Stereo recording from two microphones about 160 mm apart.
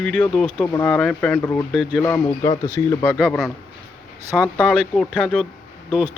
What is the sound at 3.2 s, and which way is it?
Speech, centre (ahead or behind).